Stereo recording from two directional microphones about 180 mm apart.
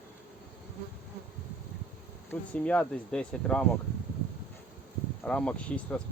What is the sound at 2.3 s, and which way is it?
Speech, 5° left (ahead or behind).